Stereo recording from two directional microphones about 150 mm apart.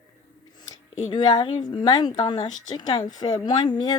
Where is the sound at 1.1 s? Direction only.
30° left (ahead or behind).